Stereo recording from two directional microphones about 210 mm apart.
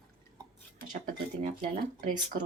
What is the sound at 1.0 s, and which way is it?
Speech, 40° right (ahead or behind).